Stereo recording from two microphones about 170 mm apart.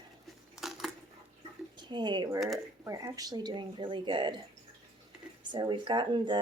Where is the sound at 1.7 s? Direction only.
25° right (ahead or behind).